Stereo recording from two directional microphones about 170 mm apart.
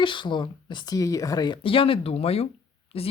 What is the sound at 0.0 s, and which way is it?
Speech, 30° left (ahead or behind).